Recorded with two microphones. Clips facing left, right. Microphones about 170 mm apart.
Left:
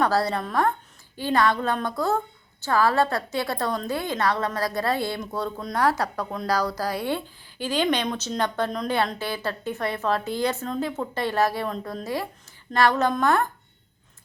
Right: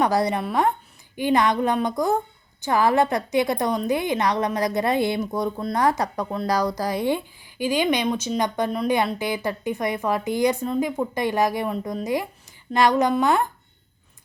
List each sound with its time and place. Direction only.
0.0 s a woman's voice: 15° right (ahead or behind)